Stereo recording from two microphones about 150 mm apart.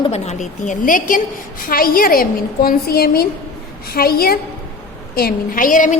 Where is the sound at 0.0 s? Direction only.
45° left (ahead or behind); by 1.2 s 65° left (ahead or behind).